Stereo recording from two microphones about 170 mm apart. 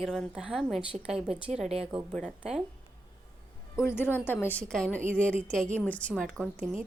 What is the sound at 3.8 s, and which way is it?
A woman's voice, 15° left (ahead or behind).